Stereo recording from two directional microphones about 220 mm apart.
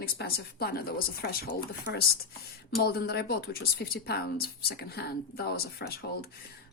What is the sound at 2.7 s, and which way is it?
A woman's voice, 45° left (ahead or behind).